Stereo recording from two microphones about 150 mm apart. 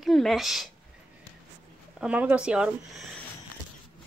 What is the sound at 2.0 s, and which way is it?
Speech, 10° right (ahead or behind).